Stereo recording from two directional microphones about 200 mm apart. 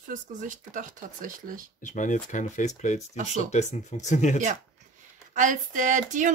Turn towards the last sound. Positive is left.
turn(degrees=-40)  # may be behind; listen again after turning